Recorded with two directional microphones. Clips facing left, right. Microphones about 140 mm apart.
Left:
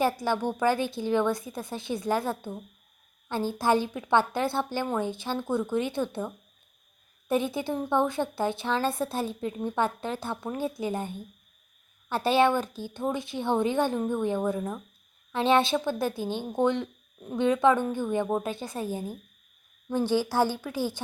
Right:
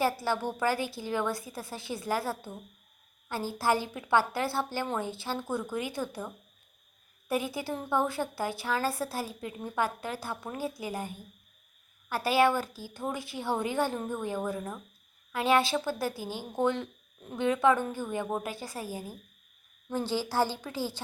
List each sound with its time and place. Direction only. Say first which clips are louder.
0.0 s a woman's voice: left 3 dB; 15° left (ahead or behind)